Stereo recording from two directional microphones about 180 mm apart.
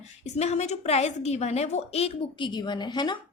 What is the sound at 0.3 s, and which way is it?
A woman's voice, 35° left (ahead or behind).